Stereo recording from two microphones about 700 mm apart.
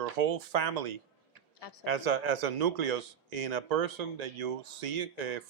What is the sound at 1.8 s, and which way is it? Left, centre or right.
Speech, right.